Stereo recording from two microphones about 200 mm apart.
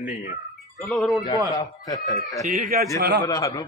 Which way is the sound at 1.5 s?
15° left (ahead or behind).